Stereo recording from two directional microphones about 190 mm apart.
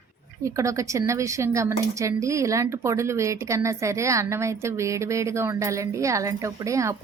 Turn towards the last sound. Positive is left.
turn(degrees=-15)  # may be behind; listen again after turning